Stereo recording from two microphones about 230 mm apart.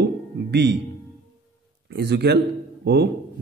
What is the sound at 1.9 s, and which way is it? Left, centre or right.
A man's voice, right.